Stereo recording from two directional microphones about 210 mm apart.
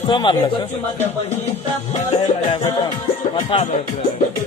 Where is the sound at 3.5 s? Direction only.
25° left (ahead or behind).